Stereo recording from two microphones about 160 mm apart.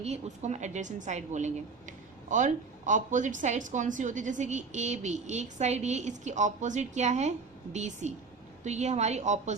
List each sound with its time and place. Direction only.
0.0 s a woman's voice: 45° right (ahead or behind)